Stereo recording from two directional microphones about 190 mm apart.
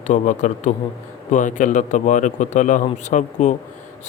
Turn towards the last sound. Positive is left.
turn(degrees=40)  # may be behind; listen again after turning